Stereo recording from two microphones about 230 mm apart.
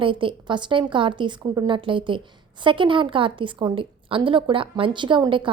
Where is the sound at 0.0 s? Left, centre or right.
Right.